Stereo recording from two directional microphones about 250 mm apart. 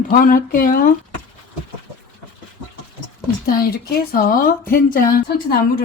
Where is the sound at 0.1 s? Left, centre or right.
Left.